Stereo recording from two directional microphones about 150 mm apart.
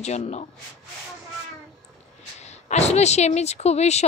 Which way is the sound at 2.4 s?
45° left (ahead or behind).